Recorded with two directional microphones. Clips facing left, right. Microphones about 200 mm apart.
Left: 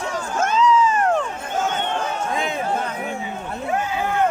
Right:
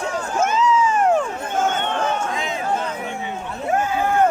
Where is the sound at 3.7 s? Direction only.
45° right (ahead or behind).